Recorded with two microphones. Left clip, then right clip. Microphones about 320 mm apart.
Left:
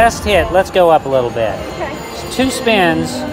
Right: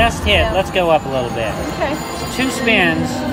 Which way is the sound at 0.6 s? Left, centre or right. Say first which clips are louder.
Left 5 dB; left.